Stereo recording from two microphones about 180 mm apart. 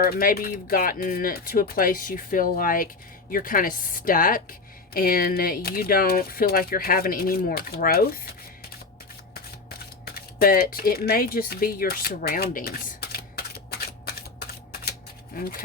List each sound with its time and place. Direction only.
0.0 s speech: 55° left (ahead or behind)
9.3 s shuffling cards: 60° left (ahead or behind)
15.3 s speech: 55° left (ahead or behind)